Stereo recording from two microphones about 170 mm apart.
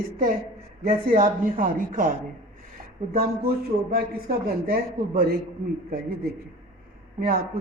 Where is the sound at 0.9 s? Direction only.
60° right (ahead or behind).